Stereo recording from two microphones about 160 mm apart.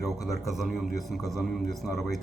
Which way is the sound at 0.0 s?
Centre (ahead or behind).